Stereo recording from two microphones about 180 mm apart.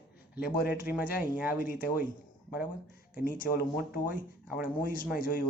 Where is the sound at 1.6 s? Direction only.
50° left (ahead or behind).